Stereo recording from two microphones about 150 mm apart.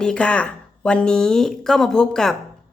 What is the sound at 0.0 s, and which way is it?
A woman's voice, 5° left (ahead or behind).